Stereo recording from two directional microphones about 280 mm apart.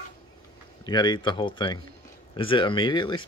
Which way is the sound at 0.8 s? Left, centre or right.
Centre.